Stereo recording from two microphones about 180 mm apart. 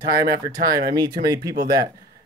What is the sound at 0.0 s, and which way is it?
Speech, 20° right (ahead or behind).